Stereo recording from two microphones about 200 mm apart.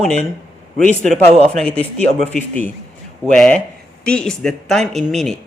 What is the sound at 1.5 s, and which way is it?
Speech, 5° left (ahead or behind).